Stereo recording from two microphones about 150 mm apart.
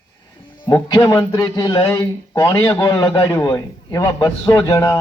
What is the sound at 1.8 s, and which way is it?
A man's voice, 15° left (ahead or behind).